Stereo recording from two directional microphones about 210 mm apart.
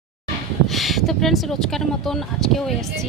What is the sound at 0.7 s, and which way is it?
Speech, centre (ahead or behind).